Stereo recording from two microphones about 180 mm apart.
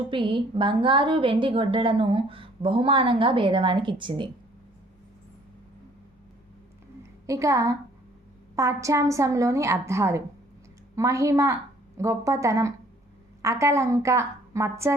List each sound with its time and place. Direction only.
0.1 s a woman's voice: 25° right (ahead or behind)
7.3 s a woman's voice: 15° right (ahead or behind)